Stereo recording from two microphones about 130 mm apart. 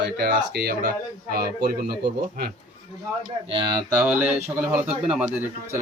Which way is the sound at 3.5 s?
35° right (ahead or behind).